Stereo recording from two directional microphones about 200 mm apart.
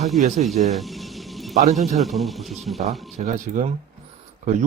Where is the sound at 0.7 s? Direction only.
Centre (ahead or behind).